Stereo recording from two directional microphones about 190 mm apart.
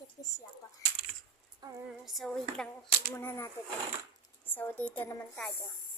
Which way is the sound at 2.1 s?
Centre (ahead or behind).